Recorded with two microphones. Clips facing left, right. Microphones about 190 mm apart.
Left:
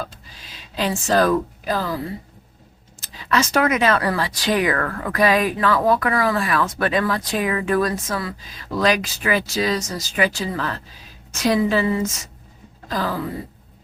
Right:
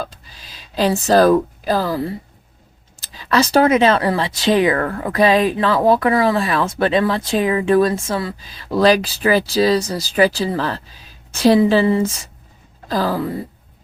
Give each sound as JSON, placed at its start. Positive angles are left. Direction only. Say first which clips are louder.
{"t": 0.5, "sound": "speech", "louder": "right 6 dB", "side_deg": -35}
{"t": 3.0, "sound": "a woman's voice", "louder": "right 4 dB", "side_deg": -35}